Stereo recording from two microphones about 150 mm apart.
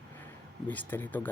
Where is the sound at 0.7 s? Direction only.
10° left (ahead or behind).